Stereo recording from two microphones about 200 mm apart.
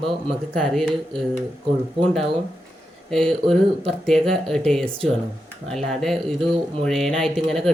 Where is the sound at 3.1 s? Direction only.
Centre (ahead or behind).